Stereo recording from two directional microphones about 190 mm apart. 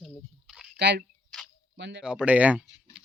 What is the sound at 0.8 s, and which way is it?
Speech, 65° right (ahead or behind).